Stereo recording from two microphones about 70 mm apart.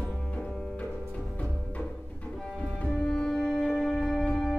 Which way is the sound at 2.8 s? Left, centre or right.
Centre.